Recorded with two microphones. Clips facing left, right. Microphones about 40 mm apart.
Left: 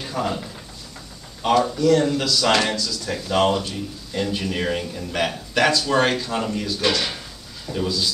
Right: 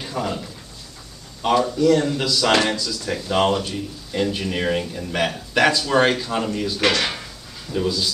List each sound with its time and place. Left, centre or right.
0.0 s a sound: centre
1.4 s a man's voice: centre
6.8 s speech: right
7.7 s a man's voice: centre